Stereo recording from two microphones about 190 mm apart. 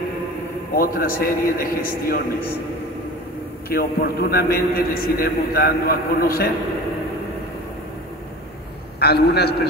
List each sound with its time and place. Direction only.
0.7 s a man's voice: 50° left (ahead or behind)
3.6 s a man's voice: 55° left (ahead or behind)
9.0 s a man's voice: 60° left (ahead or behind)